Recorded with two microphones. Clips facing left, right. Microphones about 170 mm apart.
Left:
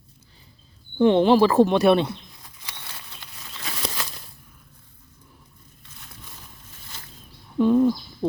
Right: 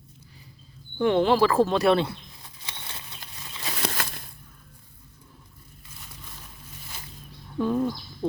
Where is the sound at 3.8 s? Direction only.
60° right (ahead or behind).